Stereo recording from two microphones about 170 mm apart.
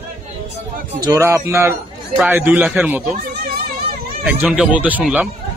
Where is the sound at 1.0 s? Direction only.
20° right (ahead or behind).